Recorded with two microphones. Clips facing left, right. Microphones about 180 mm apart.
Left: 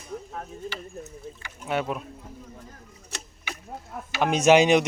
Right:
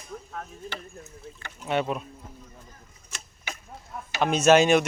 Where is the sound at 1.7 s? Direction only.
5° left (ahead or behind).